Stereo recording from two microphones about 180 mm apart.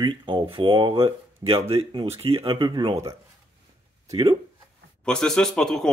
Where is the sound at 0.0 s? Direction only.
25° right (ahead or behind).